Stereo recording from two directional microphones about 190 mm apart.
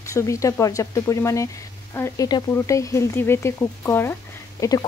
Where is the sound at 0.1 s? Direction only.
15° left (ahead or behind).